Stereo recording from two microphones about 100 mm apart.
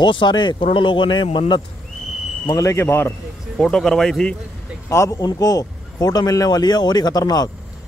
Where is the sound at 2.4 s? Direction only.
35° left (ahead or behind).